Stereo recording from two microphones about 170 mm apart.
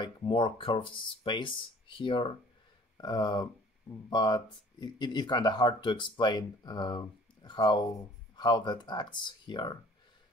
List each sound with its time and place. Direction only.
0.0 s speech: 25° left (ahead or behind)